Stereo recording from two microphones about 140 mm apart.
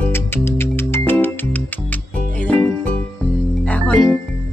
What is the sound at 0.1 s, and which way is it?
Music, 15° left (ahead or behind).